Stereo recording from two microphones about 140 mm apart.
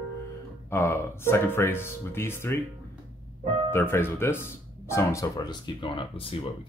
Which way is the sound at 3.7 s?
15° left (ahead or behind).